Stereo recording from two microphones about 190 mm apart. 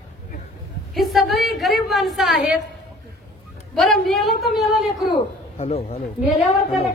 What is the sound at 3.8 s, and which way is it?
A woman's voice, centre (ahead or behind).